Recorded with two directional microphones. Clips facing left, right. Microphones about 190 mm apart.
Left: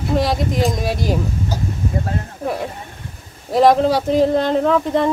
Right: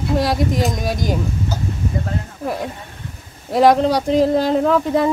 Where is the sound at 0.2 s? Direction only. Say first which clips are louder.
Right 1 dB; centre (ahead or behind).